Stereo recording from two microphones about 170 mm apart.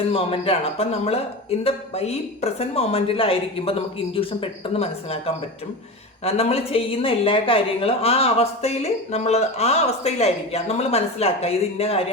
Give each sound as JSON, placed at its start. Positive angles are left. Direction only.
{"t": 0.1, "sound": "a woman's voice", "side_deg": 35}